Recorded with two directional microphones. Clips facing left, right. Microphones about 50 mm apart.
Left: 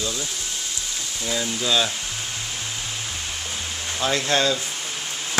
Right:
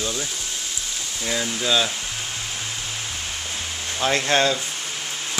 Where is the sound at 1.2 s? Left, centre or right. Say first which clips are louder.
Right 1 dB; centre.